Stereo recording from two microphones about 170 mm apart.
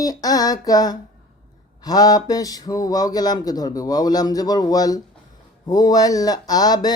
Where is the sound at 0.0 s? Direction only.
20° left (ahead or behind).